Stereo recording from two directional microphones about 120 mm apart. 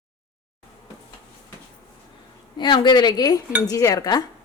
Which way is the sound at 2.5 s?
40° left (ahead or behind).